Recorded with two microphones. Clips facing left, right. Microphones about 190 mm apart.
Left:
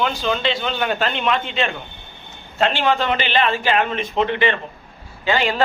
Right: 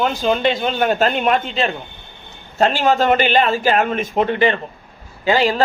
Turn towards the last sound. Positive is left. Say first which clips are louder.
# right 3 dB
turn(degrees=-35)  # may be behind; listen again after turning